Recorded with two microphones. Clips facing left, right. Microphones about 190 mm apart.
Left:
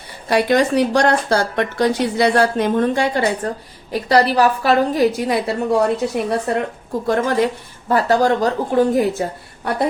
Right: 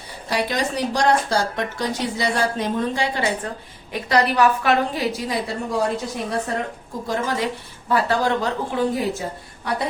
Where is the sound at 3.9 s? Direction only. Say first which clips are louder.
Left 4 dB; 35° left (ahead or behind).